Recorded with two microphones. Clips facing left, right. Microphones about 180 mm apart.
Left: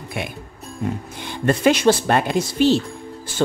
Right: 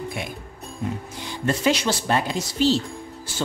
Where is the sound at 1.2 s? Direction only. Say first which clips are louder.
Left 5 dB; 60° left (ahead or behind).